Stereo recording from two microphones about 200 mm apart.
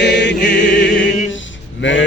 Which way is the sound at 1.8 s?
65° left (ahead or behind).